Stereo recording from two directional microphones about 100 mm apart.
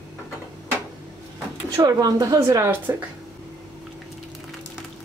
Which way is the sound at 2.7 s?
20° right (ahead or behind).